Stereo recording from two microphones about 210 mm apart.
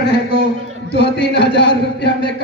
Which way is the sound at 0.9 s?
50° left (ahead or behind).